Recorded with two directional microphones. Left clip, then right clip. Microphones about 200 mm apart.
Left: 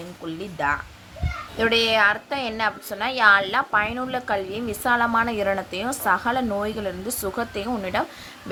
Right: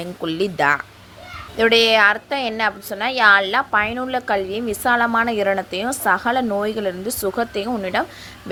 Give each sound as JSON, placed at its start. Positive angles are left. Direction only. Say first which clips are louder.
{"t": 0.3, "sound": "a woman's voice", "louder": "right 7 dB", "side_deg": -40}